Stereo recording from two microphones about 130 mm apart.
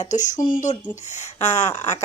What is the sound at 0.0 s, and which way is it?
Speech, 70° left (ahead or behind).